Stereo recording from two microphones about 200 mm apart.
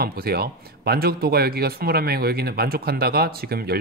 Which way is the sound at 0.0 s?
50° right (ahead or behind).